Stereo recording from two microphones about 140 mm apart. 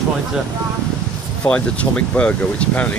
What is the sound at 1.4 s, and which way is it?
Speech, 10° left (ahead or behind).